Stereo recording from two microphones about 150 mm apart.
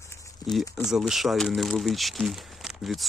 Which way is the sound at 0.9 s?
Centre (ahead or behind).